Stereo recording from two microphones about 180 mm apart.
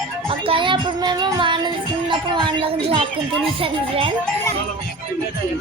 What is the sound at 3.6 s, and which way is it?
Speech, 30° right (ahead or behind).